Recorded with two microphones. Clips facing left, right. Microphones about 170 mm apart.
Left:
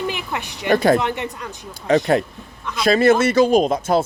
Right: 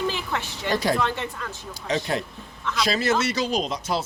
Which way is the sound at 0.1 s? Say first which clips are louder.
Left 2 dB; 15° left (ahead or behind).